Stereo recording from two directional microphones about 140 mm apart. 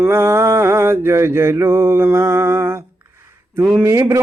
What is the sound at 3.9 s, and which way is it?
Speech, 20° right (ahead or behind).